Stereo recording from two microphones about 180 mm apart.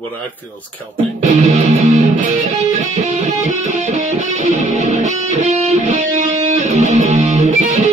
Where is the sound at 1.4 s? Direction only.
35° right (ahead or behind).